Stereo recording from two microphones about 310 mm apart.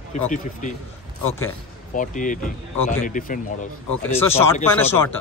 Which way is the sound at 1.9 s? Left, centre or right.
Left.